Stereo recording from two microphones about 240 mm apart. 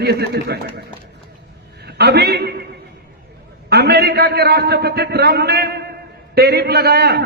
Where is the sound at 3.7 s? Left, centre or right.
Right.